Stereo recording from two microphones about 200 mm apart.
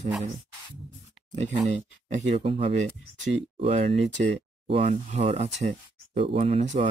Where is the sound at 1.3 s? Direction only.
35° right (ahead or behind).